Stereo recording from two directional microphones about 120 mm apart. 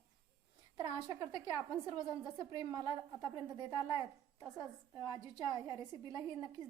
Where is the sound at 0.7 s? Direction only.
35° right (ahead or behind).